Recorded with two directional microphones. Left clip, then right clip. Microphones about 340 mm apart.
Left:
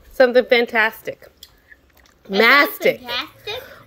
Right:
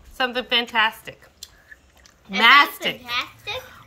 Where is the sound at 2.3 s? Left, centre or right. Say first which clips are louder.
Left 1 dB; centre.